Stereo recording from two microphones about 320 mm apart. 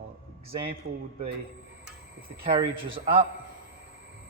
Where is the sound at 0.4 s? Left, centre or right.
Centre.